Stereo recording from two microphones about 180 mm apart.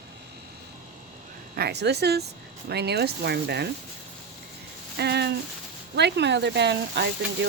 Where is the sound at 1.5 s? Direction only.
65° right (ahead or behind).